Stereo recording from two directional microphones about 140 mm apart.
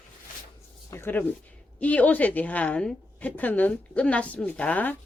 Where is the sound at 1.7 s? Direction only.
10° left (ahead or behind).